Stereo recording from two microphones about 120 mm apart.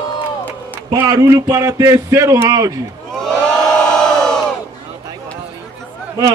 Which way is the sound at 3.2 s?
5° left (ahead or behind).